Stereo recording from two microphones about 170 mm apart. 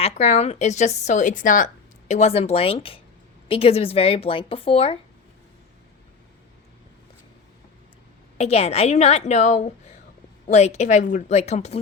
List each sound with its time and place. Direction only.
0.0 s a woman's voice: 40° left (ahead or behind)
8.4 s a woman's voice: 40° left (ahead or behind)